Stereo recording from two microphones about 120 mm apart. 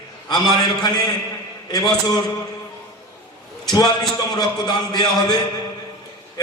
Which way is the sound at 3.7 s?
30° left (ahead or behind).